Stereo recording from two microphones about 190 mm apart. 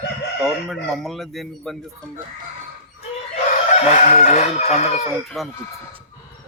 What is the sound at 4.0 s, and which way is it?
Crowing, 40° left (ahead or behind).